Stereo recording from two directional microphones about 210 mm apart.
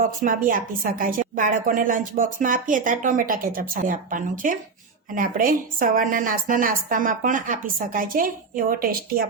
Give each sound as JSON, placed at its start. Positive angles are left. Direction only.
{"t": 0.2, "sound": "a woman's voice", "side_deg": -40}